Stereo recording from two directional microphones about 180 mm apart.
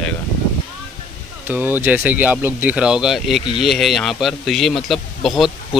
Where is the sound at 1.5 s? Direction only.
10° right (ahead or behind).